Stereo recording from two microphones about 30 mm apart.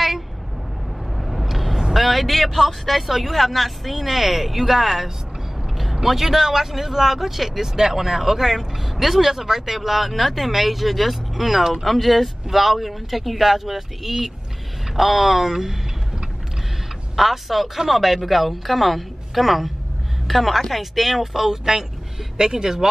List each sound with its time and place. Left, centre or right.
1.1 s vehicle: centre
2.0 s speech: centre
17.1 s speech: centre